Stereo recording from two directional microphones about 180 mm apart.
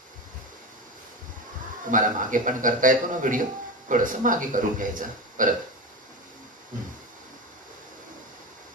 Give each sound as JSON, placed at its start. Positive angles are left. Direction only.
{"t": 1.9, "sound": "speech", "side_deg": -50}